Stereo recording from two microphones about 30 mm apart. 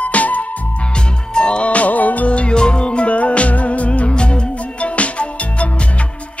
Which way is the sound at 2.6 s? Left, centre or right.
Left.